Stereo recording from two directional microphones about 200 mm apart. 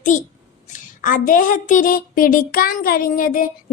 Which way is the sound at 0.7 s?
40° left (ahead or behind).